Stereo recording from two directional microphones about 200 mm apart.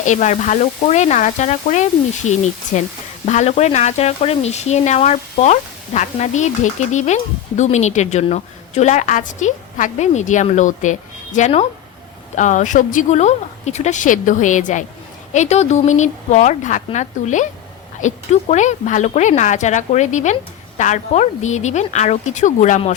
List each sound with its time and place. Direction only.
0.0 s speech: 35° left (ahead or behind)